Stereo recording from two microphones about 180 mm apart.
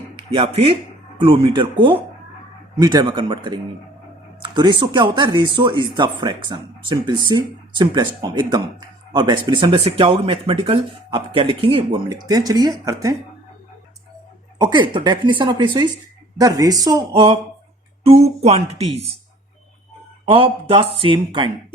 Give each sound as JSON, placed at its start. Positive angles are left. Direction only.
{"t": 0.3, "sound": "speech", "side_deg": -35}
{"t": 14.6, "sound": "speech", "side_deg": -25}
{"t": 20.3, "sound": "speech", "side_deg": -30}